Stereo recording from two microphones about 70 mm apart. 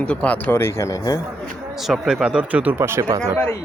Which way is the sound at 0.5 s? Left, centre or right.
Left.